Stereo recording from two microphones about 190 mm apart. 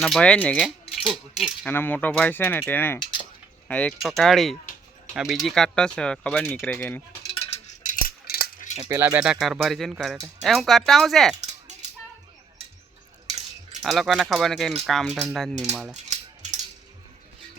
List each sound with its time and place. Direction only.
0.0 s speech: 5° left (ahead or behind)
1.6 s a sound: 10° left (ahead or behind)
3.7 s speech: 5° left (ahead or behind)
7.9 s a sound: 50° left (ahead or behind)
8.9 s speech: 10° right (ahead or behind)
13.8 s speech: centre (ahead or behind)